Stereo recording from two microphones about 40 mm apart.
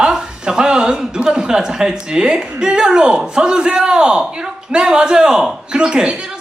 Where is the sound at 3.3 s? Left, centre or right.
Right.